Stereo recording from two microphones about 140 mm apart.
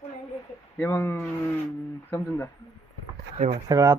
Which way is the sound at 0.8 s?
15° left (ahead or behind).